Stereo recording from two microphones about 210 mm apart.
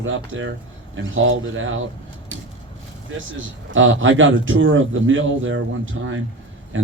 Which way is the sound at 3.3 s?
70° right (ahead or behind).